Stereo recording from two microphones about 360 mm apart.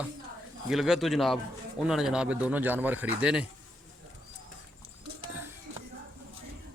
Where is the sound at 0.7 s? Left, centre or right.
Centre.